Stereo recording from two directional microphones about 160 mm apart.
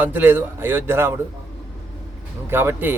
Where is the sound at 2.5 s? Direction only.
15° right (ahead or behind).